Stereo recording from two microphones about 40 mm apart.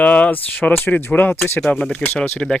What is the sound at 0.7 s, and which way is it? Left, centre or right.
Speech, left.